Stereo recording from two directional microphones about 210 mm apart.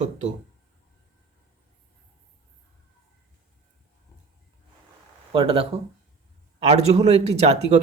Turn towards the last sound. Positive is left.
turn(degrees=-30)  # may be behind; listen again after turning